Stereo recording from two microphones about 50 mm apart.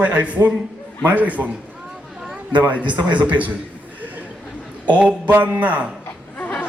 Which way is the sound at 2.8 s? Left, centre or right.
Right.